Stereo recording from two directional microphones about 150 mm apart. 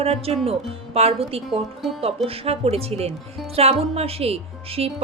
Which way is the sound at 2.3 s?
40° right (ahead or behind).